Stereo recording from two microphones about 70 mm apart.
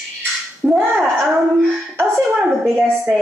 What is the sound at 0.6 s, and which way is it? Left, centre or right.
Finger snapping, right.